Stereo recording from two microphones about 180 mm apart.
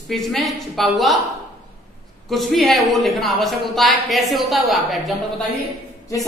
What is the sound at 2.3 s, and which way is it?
Speech, centre (ahead or behind).